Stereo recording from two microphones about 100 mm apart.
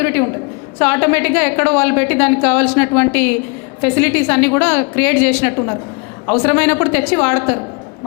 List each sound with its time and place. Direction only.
0.0 s a woman's voice: 25° left (ahead or behind)